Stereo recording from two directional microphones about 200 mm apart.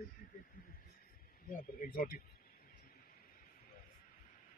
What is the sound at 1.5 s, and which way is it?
Speech, 45° left (ahead or behind).